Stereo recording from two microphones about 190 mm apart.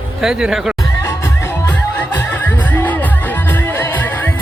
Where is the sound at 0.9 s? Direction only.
15° left (ahead or behind).